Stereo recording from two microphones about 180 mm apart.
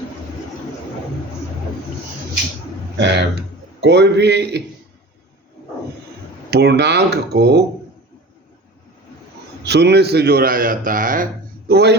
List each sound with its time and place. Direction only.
3.0 s speech: 70° right (ahead or behind)
6.5 s speech: 65° right (ahead or behind)
9.6 s a man's voice: 65° right (ahead or behind); by 11.3 s 50° right (ahead or behind)
11.7 s a man's voice: 65° right (ahead or behind)